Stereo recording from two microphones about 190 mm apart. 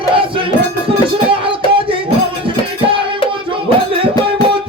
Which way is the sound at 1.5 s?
30° right (ahead or behind).